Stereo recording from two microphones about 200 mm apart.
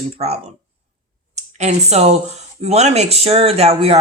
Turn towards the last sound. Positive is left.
turn(degrees=-30)  # may be behind; listen again after turning